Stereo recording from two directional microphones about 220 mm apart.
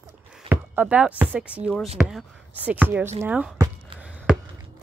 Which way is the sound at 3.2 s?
5° right (ahead or behind).